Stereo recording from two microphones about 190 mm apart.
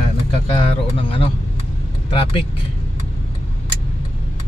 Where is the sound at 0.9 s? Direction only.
30° left (ahead or behind).